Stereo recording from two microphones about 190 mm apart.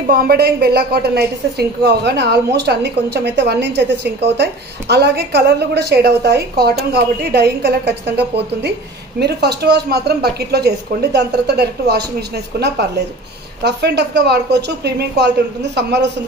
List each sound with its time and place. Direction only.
0.1 s a woman's voice: 55° right (ahead or behind)